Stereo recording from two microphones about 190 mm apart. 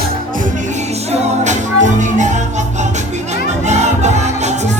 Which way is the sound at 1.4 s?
40° right (ahead or behind).